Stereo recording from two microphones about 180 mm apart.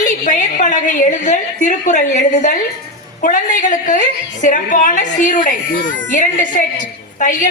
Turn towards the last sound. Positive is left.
turn(degrees=45)  # may be behind; listen again after turning